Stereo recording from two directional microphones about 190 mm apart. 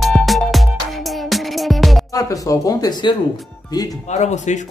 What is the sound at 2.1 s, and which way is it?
Speech, 20° left (ahead or behind).